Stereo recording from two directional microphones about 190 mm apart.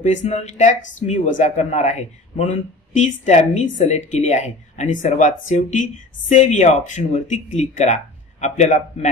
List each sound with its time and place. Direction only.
0.0 s speech: 40° left (ahead or behind)